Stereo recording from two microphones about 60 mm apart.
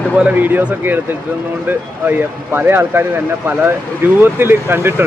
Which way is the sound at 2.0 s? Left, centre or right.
Right.